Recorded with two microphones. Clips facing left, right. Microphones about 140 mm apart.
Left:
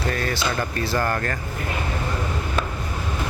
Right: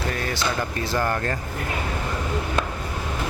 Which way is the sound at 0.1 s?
10° right (ahead or behind).